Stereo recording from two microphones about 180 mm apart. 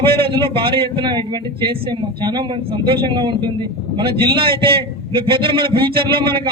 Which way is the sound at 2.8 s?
25° right (ahead or behind).